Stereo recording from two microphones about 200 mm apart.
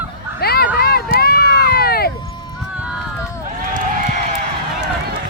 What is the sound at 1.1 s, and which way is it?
Run, 50° left (ahead or behind).